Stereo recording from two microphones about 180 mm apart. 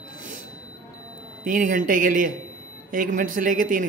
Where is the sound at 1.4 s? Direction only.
45° right (ahead or behind).